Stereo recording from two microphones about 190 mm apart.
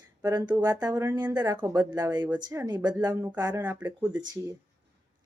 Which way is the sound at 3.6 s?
10° right (ahead or behind).